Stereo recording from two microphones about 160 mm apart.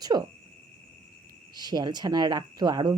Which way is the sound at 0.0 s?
25° right (ahead or behind).